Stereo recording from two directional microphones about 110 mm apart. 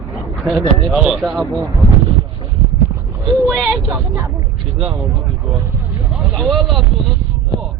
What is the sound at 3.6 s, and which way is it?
Speech, 10° right (ahead or behind).